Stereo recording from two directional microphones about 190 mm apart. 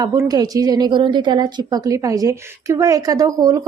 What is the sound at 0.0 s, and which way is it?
A woman's voice, 20° right (ahead or behind).